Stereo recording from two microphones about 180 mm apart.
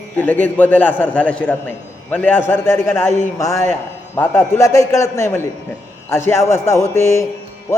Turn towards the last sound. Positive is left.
turn(degrees=15)  # may be behind; listen again after turning